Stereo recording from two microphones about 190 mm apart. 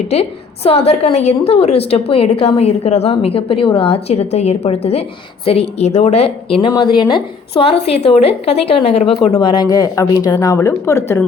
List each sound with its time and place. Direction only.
0.1 s a woman's voice: 30° left (ahead or behind); by 11.2 s 15° left (ahead or behind)